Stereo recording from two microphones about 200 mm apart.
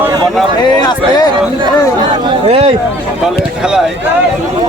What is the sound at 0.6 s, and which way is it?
Speech, 20° left (ahead or behind).